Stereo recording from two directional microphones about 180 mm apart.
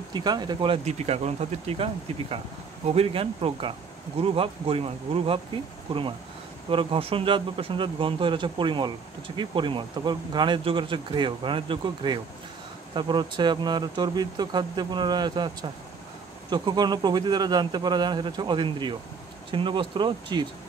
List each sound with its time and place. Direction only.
0.1 s speech: 25° right (ahead or behind)
0.8 s speech: 35° right (ahead or behind)